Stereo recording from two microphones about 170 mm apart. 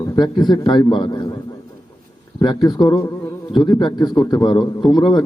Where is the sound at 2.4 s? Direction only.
25° left (ahead or behind).